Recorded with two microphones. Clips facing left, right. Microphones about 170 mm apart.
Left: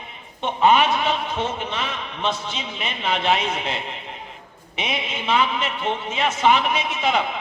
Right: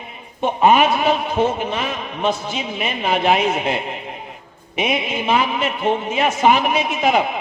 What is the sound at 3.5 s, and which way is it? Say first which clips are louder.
Speech: right 6 dB; 55° right (ahead or behind).